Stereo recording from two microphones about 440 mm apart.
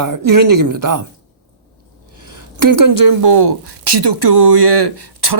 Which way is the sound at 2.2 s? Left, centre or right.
Right.